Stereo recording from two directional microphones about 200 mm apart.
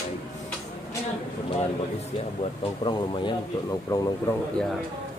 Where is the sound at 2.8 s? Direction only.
25° left (ahead or behind).